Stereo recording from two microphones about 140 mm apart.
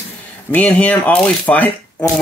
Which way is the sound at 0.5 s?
10° left (ahead or behind).